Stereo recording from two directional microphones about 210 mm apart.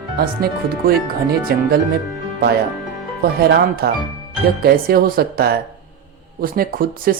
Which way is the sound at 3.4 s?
50° right (ahead or behind).